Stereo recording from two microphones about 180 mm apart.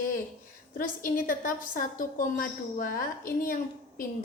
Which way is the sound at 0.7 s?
50° left (ahead or behind).